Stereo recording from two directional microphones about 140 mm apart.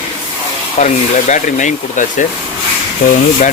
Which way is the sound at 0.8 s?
55° left (ahead or behind).